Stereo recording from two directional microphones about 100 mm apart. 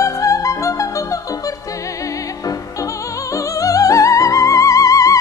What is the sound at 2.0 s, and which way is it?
Music, 35° left (ahead or behind).